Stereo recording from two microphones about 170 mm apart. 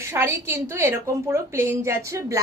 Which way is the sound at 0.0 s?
15° right (ahead or behind).